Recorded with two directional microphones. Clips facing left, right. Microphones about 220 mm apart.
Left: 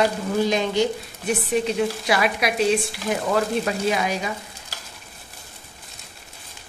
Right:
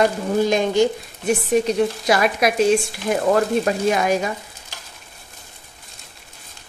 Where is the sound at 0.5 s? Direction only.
50° right (ahead or behind).